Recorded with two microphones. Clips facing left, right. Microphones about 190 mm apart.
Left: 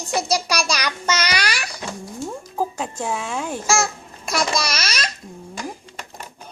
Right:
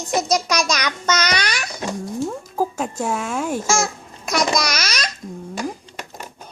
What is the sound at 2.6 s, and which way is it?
Music, 10° right (ahead or behind).